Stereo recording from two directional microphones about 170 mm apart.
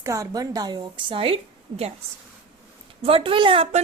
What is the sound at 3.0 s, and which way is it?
Speech, 30° right (ahead or behind).